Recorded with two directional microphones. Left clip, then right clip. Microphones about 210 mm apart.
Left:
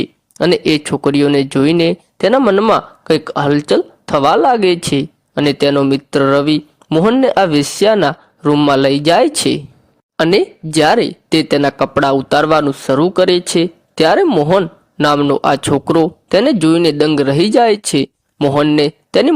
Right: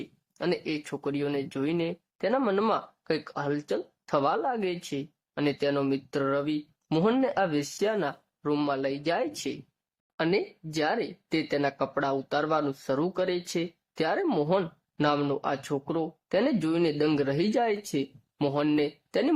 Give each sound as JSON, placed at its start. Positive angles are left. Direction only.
{"t": 0.0, "sound": "speech", "side_deg": 40}
{"t": 6.8, "sound": "speech", "side_deg": 30}